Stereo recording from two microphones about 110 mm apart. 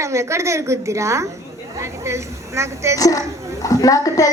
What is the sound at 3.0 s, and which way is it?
A child's voice, 35° left (ahead or behind).